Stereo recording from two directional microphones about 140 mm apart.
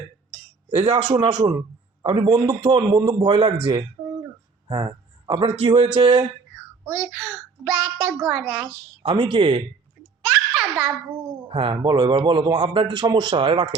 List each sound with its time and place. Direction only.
0.8 s a man's voice: 40° right (ahead or behind)
4.7 s a sound: 30° right (ahead or behind)
5.5 s a man's voice: 40° right (ahead or behind)
6.8 s a child's voice: centre (ahead or behind)
9.0 s a man's voice: 35° right (ahead or behind)
10.2 s a sound: 5° right (ahead or behind)
11.4 s a man's voice: 40° right (ahead or behind)